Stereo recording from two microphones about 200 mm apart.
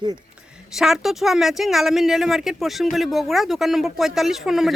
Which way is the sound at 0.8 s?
Centre (ahead or behind).